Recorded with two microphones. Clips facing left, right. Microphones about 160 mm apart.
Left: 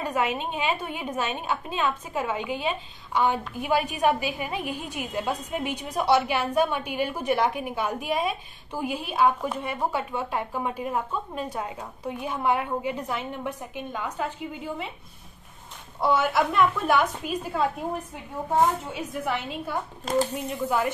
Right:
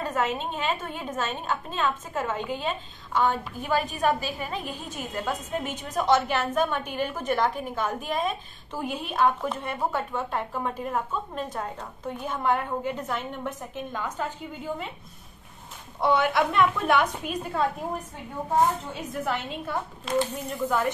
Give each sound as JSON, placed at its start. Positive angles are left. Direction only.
{"t": 0.0, "sound": "a woman's voice", "side_deg": 10}
{"t": 16.0, "sound": "a woman's voice", "side_deg": 0}
{"t": 19.2, "sound": "a woman's voice", "side_deg": 5}
{"t": 20.1, "sound": "speech", "side_deg": 40}
{"t": 20.6, "sound": "a woman's voice", "side_deg": 10}